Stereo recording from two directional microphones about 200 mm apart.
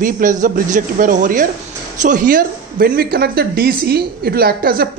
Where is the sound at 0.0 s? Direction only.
40° right (ahead or behind).